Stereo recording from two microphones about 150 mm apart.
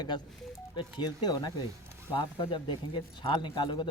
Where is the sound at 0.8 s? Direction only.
30° left (ahead or behind).